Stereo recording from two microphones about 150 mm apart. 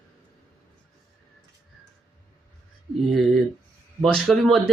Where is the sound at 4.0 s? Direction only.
Centre (ahead or behind).